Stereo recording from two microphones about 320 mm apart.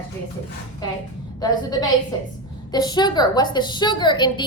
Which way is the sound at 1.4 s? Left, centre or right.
Centre.